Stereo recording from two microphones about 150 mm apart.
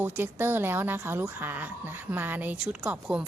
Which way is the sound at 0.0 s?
15° right (ahead or behind).